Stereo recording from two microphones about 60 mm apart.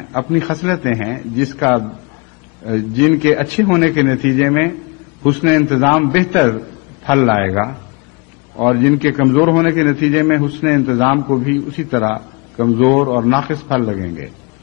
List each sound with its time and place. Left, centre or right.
0.1 s a man's voice: centre